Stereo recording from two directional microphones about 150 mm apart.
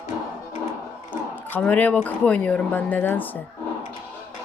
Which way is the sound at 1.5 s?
10° left (ahead or behind).